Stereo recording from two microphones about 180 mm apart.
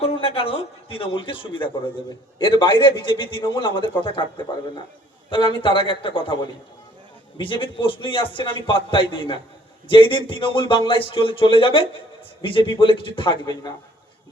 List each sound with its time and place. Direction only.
0.0 s a man's voice: 30° left (ahead or behind)
5.3 s a man's voice: 25° left (ahead or behind)